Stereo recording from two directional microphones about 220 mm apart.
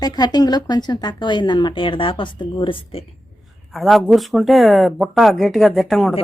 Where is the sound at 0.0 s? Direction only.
20° left (ahead or behind).